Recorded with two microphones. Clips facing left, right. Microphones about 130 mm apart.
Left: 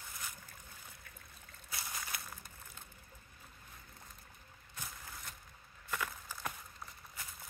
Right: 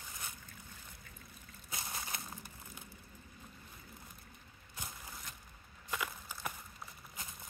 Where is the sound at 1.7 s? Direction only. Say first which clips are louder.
Right 1 dB; 25° right (ahead or behind).